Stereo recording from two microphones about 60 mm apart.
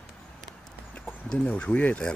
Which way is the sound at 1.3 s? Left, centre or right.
Centre.